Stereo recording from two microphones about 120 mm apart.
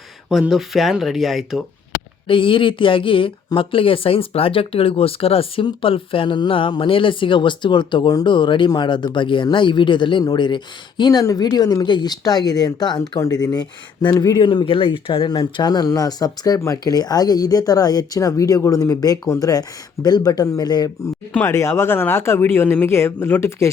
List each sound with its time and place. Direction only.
0.3 s speech: centre (ahead or behind)
2.2 s speech: 45° left (ahead or behind)
21.4 s speech: 20° left (ahead or behind)